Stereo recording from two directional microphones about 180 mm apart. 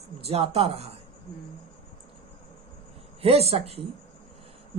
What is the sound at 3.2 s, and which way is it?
Female singing, 35° right (ahead or behind).